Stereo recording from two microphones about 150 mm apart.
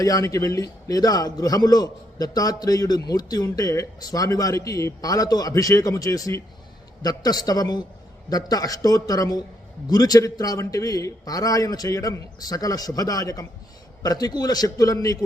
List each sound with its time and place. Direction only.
0.0 s a man's voice: 20° left (ahead or behind)